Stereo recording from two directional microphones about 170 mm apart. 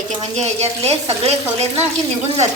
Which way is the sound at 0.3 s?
40° right (ahead or behind).